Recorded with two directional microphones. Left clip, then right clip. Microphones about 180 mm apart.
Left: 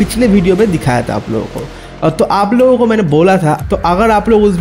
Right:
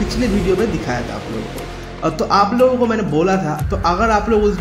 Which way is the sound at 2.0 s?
50° left (ahead or behind).